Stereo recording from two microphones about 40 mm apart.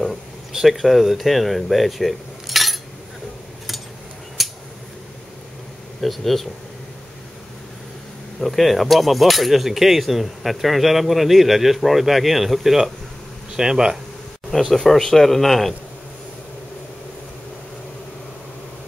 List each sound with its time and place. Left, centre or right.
0.5 s speech: centre
4.4 s a sound: centre
5.9 s speech: centre
8.4 s speech: centre
13.6 s speech: centre
14.5 s speech: centre